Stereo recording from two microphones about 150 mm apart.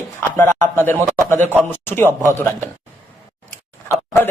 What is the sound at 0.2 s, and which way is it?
Speech, 15° left (ahead or behind).